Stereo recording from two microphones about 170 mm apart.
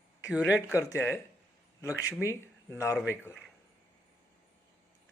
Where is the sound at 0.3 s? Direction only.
10° right (ahead or behind).